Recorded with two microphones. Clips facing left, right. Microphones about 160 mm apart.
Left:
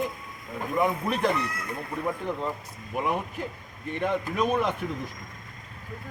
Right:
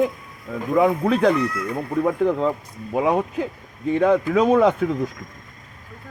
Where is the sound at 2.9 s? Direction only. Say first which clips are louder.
Right 9 dB; 90° right.